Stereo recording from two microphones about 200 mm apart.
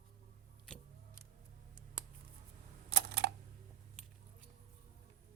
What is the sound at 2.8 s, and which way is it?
Typing, 60° right (ahead or behind).